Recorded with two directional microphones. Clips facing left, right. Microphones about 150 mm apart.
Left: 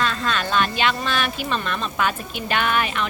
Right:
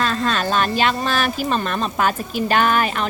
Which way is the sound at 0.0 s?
40° right (ahead or behind).